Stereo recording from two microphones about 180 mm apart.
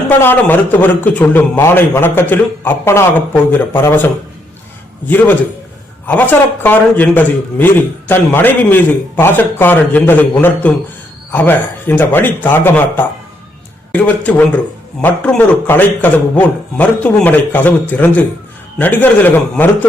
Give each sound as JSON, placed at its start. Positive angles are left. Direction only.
{"t": 0.2, "sound": "a man's voice", "side_deg": 10}
{"t": 5.0, "sound": "a man's voice", "side_deg": 10}